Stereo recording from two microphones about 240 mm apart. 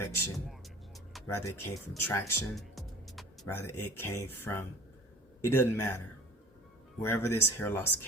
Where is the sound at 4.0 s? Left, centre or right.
Centre.